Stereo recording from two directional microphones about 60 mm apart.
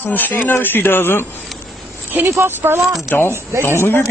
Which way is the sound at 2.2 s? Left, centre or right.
Right.